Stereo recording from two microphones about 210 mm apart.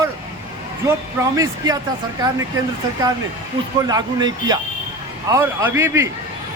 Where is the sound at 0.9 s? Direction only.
15° right (ahead or behind).